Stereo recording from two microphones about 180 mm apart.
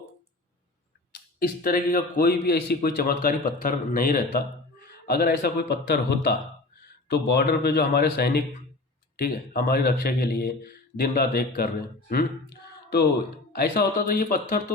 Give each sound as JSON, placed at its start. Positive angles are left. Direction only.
{"t": 1.4, "sound": "a man's voice", "side_deg": 55}